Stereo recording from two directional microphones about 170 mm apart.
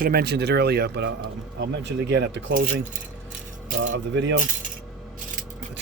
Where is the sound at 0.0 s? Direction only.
65° right (ahead or behind).